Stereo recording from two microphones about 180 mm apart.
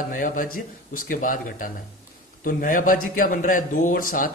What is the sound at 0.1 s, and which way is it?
A man's voice, 50° left (ahead or behind).